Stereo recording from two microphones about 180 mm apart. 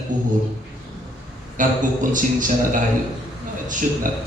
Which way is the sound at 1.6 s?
45° right (ahead or behind).